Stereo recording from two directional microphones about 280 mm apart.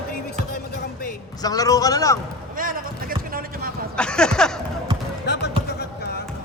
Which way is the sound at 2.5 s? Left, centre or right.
Right.